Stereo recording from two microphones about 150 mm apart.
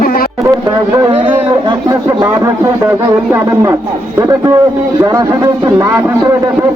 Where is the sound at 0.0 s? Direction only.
75° left (ahead or behind).